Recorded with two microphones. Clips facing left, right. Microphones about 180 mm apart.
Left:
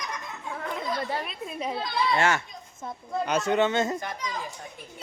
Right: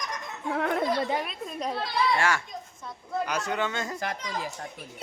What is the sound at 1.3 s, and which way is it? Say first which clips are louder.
Speech: even; 5° left (ahead or behind).